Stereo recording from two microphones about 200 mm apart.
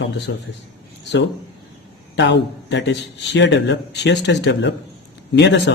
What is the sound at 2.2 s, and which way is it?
A man's voice, 60° left (ahead or behind).